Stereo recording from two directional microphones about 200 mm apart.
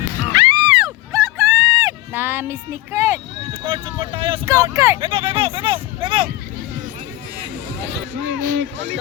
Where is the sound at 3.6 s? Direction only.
25° right (ahead or behind).